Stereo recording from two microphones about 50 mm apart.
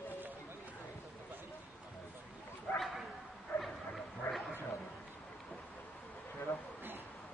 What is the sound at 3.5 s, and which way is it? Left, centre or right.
Bow-wow, left.